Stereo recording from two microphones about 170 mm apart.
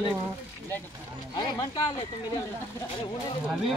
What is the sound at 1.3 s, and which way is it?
Speech, 25° left (ahead or behind).